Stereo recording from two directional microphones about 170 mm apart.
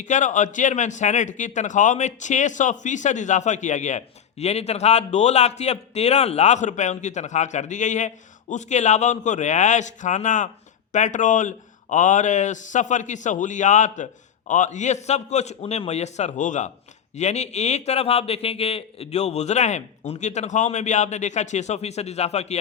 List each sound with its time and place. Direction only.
0.0 s a man's voice: 45° left (ahead or behind)